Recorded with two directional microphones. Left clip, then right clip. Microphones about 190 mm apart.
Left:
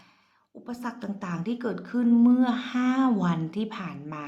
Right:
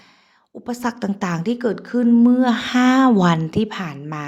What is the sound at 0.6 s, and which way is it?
A woman's voice, 40° right (ahead or behind).